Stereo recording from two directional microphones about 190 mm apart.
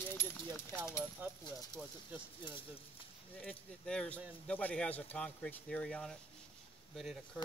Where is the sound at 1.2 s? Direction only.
10° right (ahead or behind).